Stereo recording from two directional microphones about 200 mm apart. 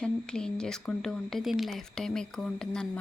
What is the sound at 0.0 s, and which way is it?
Speech, 5° left (ahead or behind).